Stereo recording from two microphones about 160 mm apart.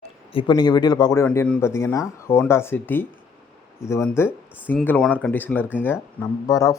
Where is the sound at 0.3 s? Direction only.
25° left (ahead or behind).